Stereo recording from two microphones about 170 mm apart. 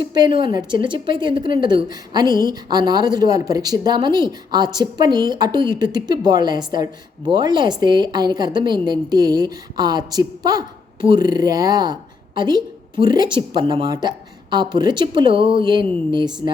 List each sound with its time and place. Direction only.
0.0 s a woman's voice: 25° right (ahead or behind)